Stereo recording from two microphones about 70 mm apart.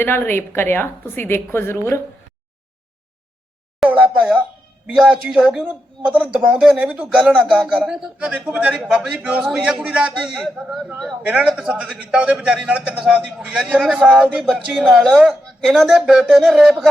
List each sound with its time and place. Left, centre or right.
0.0 s a woman's voice: left
3.8 s a sound: centre
4.9 s speech: centre